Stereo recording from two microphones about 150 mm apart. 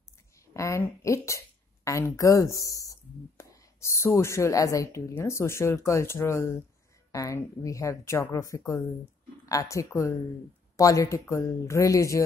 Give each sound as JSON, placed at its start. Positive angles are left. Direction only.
{"t": 0.5, "sound": "speech", "side_deg": 20}